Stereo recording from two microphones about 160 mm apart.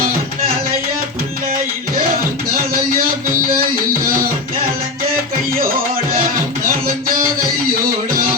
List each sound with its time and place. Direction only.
2.5 s music: 65° right (ahead or behind)
5.5 s music: 65° right (ahead or behind)